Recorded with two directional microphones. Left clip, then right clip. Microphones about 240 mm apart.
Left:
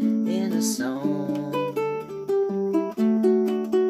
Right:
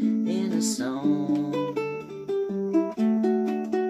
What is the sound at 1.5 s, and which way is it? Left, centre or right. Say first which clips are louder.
Music: left 3 dB; centre.